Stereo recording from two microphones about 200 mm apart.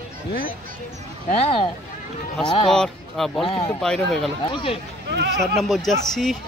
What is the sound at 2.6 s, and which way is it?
Speech, centre (ahead or behind).